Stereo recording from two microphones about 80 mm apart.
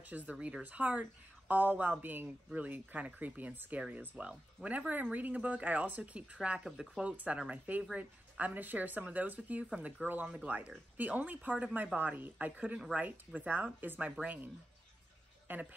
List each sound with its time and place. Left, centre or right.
0.1 s speech: centre